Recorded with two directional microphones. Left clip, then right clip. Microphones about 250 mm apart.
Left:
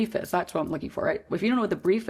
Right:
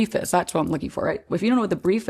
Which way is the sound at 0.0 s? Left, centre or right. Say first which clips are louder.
Right 5 dB; right.